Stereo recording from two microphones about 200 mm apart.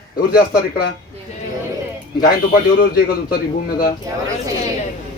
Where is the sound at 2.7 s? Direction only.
50° left (ahead or behind).